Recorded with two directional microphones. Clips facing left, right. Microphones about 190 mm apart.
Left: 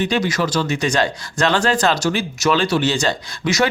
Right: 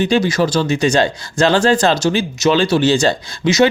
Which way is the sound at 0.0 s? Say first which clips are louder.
Right 5 dB; 30° right (ahead or behind).